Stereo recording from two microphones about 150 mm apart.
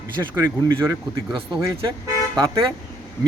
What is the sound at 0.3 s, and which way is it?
Speech, 15° right (ahead or behind).